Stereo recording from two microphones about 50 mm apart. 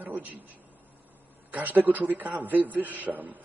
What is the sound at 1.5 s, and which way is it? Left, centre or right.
A man's voice, right.